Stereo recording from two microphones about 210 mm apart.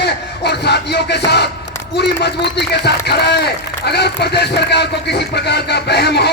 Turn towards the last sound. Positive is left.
turn(degrees=50)  # may be behind; listen again after turning